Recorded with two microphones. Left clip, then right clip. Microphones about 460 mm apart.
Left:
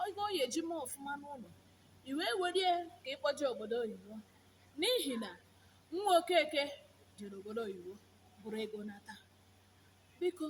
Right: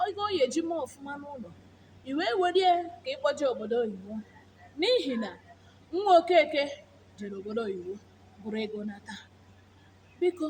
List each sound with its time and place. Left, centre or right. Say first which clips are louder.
0.0 s a woman's voice: right 9 dB; left